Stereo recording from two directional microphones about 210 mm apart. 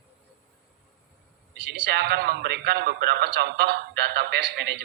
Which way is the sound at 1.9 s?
50° right (ahead or behind).